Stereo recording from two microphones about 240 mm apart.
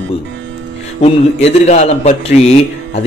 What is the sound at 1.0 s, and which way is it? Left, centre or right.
A man's voice, left.